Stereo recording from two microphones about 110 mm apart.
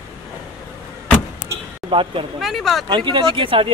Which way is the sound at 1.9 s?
50° right (ahead or behind).